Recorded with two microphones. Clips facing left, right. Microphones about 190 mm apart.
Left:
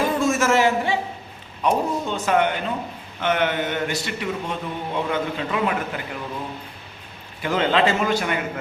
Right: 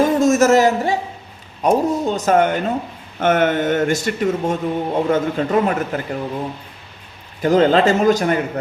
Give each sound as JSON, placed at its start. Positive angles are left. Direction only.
{"t": 0.0, "sound": "a sound", "side_deg": -40}
{"t": 1.6, "sound": "speech", "side_deg": -40}
{"t": 7.4, "sound": "a man's voice", "side_deg": -40}